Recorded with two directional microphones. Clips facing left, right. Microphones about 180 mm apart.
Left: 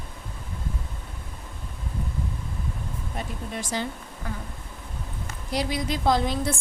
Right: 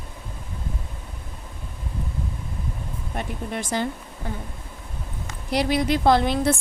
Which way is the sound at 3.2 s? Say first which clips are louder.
Right 4 dB; 60° right (ahead or behind).